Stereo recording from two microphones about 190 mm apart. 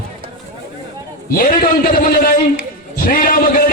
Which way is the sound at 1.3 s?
50° left (ahead or behind).